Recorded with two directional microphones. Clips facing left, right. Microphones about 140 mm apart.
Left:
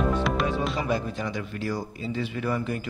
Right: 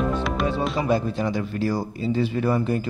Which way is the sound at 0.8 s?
30° right (ahead or behind).